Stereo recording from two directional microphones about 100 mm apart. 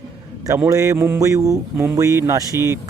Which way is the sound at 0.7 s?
35° right (ahead or behind).